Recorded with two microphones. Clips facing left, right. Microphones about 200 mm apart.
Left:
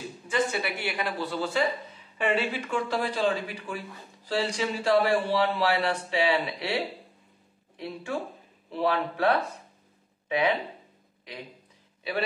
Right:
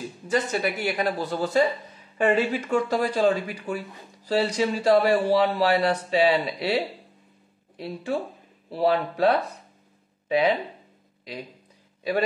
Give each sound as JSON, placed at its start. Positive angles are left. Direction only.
{"t": 0.3, "sound": "speech", "side_deg": -40}
{"t": 7.8, "sound": "speech", "side_deg": -35}